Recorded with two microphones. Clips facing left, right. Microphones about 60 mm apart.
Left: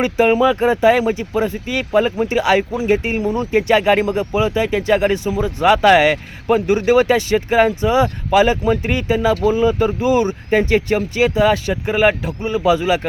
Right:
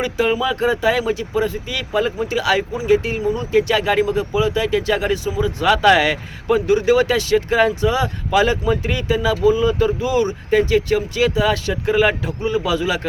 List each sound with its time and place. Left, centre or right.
0.0 s speech: left